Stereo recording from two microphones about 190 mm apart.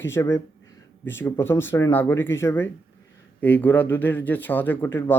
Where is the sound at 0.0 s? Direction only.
15° left (ahead or behind).